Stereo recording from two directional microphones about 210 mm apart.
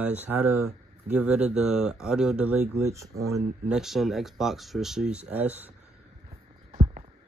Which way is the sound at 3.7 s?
Centre (ahead or behind).